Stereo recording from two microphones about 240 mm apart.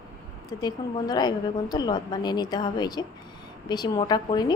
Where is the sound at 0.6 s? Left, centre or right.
Centre.